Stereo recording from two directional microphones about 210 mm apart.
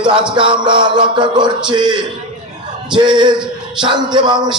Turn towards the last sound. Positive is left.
turn(degrees=-20)  # may be behind; listen again after turning